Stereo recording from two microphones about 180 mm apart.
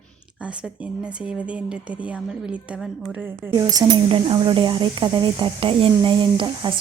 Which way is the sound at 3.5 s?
20° right (ahead or behind).